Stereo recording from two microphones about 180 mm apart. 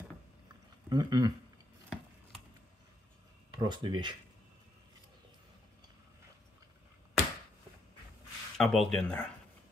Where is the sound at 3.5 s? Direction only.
25° right (ahead or behind).